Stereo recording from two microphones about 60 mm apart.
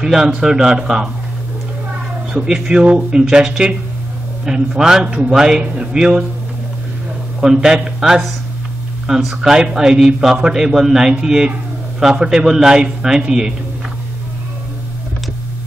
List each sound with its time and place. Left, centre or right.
0.0 s a man's voice: centre
2.4 s a man's voice: centre
5.0 s a man's voice: right
7.3 s a man's voice: centre